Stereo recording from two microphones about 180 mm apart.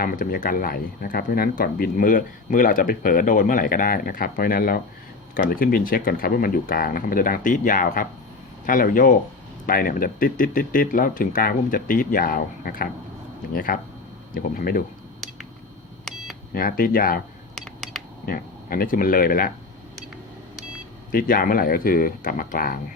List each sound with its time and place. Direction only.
0.0 s speech: 50° left (ahead or behind)
16.1 s cash register: 5° left (ahead or behind)
16.6 s speech: 50° left (ahead or behind)
17.5 s a sound: centre (ahead or behind)
18.3 s speech: 50° left (ahead or behind)
21.1 s speech: 50° left (ahead or behind)